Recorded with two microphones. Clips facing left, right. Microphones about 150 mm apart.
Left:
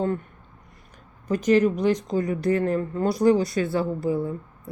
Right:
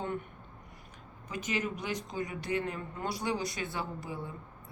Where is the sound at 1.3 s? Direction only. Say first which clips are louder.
Left 15 dB; 40° left (ahead or behind).